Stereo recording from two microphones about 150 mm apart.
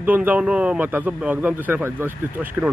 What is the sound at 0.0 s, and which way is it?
Speech, 10° right (ahead or behind).